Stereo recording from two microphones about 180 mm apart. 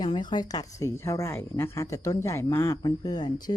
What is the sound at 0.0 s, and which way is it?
A woman's voice, 25° left (ahead or behind).